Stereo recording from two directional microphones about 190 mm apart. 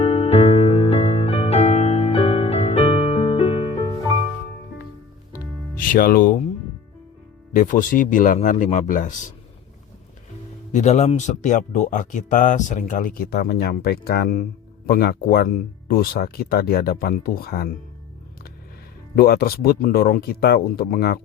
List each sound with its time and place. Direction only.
0.0 s music: 30° left (ahead or behind)
5.7 s speech: 50° left (ahead or behind)
7.5 s speech: 45° left (ahead or behind)
10.7 s speech: 35° left (ahead or behind); by 17.7 s 55° left (ahead or behind)
19.1 s speech: 55° left (ahead or behind)